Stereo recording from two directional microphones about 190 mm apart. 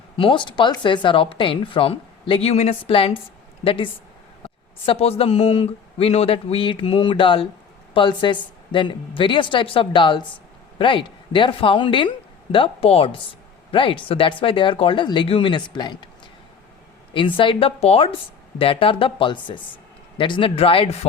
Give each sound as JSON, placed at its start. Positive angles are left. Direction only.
{"t": 0.2, "sound": "a woman's voice", "side_deg": 25}
{"t": 17.2, "sound": "a woman's voice", "side_deg": 25}